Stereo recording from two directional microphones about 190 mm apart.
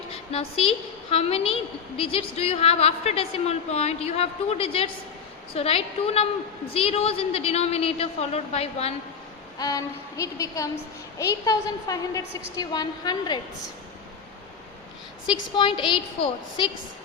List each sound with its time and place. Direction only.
0.3 s a woman's voice: 30° left (ahead or behind)
9.6 s a sound: 20° left (ahead or behind)
11.2 s a woman's voice: 20° left (ahead or behind)
15.3 s a woman's voice: 25° left (ahead or behind)